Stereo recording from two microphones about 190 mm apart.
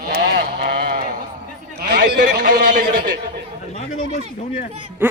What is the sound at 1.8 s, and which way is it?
A man's voice, 55° right (ahead or behind).